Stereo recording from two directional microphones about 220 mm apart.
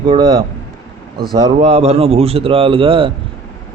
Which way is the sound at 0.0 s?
20° right (ahead or behind).